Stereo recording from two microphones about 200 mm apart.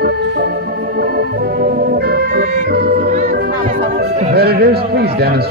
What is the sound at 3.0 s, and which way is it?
Music, 40° right (ahead or behind).